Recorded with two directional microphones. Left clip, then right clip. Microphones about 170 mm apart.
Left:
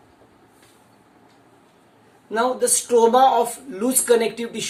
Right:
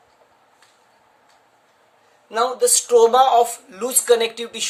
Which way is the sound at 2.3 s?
40° right (ahead or behind).